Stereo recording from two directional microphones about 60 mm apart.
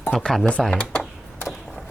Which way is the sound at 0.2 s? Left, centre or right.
Centre.